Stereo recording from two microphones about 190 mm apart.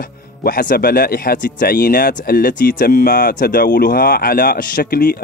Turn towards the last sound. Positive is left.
turn(degrees=50)  # may be behind; listen again after turning